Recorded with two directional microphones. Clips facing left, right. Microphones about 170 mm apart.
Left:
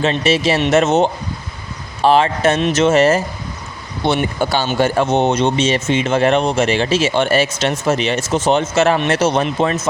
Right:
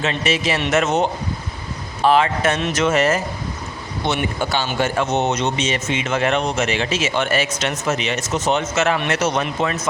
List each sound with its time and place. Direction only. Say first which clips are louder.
0.0 s speech: left 5 dB; 30° left (ahead or behind)